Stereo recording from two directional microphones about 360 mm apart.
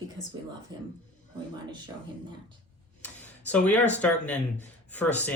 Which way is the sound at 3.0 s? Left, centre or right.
Centre.